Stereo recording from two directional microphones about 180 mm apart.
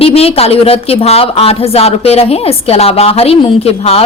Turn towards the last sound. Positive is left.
turn(degrees=35)  # may be behind; listen again after turning